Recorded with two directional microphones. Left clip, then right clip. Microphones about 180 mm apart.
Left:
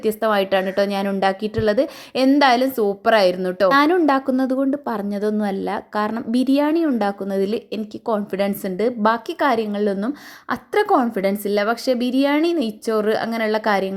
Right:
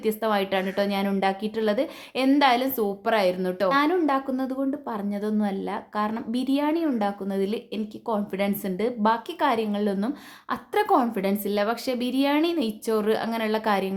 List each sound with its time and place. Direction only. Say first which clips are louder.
0.0 s a woman's voice: left 6 dB; 25° left (ahead or behind)
3.7 s a woman's voice: left 6 dB; 40° left (ahead or behind)